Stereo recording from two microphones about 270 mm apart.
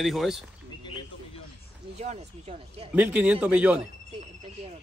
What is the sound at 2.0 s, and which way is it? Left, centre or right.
Speech, right.